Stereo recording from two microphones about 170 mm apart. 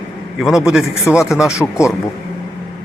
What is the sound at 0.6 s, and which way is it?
Speech, 5° right (ahead or behind).